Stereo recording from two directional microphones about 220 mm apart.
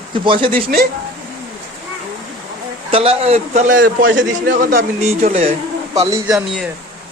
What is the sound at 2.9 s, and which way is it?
Speech, 25° right (ahead or behind).